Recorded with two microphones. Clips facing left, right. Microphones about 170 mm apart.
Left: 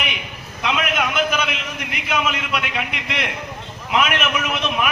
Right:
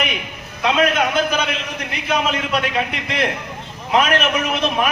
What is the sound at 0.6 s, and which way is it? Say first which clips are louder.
A man's voice: right 5 dB; 35° right (ahead or behind).